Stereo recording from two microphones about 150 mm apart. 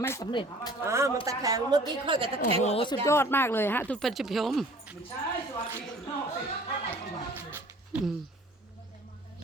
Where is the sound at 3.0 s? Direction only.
15° left (ahead or behind).